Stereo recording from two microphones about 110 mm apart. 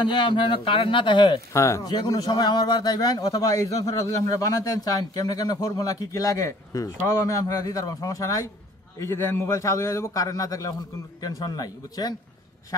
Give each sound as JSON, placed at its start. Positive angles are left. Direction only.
{"t": 0.0, "sound": "speech", "side_deg": 45}
{"t": 1.5, "sound": "a man's voice", "side_deg": 25}